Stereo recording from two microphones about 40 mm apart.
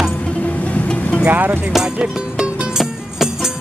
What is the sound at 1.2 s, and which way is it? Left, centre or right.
Speech, right.